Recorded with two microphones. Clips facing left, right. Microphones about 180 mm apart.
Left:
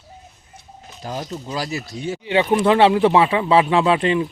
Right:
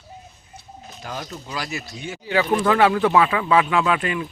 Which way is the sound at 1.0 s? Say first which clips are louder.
Left 5 dB; 25° left (ahead or behind).